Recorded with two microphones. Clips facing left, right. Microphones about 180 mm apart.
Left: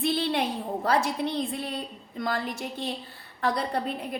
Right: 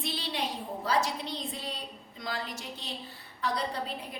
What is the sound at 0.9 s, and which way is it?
A woman's voice, 55° left (ahead or behind).